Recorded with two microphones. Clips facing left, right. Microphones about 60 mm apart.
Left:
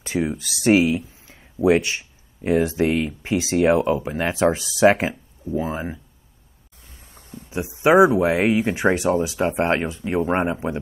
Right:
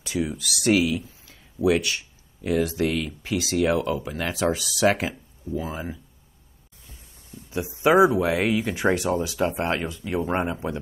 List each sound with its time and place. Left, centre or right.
0.0 s speech: left
7.4 s a sound: left
7.8 s speech: left